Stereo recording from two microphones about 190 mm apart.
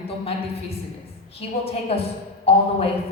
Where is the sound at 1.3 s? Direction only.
30° left (ahead or behind).